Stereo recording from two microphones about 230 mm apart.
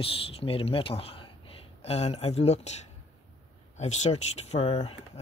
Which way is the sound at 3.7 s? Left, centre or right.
Left.